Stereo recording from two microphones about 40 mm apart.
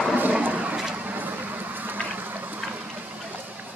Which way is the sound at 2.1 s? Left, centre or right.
Right.